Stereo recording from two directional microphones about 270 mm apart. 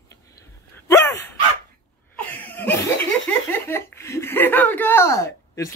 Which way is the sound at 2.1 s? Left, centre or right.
Centre.